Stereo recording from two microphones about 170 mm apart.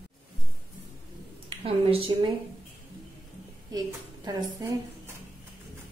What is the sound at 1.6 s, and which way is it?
Speech, 35° right (ahead or behind).